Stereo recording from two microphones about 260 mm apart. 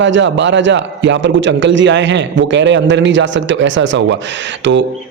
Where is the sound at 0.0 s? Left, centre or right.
Right.